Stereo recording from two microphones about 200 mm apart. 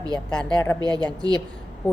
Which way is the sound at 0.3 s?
5° left (ahead or behind).